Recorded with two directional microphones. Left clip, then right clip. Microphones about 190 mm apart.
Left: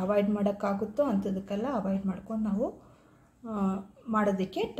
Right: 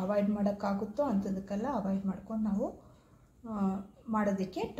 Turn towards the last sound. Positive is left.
turn(degrees=15)  # may be behind; listen again after turning